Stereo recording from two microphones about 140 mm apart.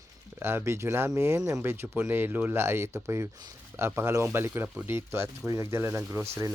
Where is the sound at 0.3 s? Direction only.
15° right (ahead or behind).